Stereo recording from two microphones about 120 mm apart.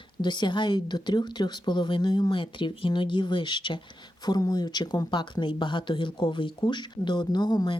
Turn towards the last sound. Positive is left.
turn(degrees=35)  # may be behind; listen again after turning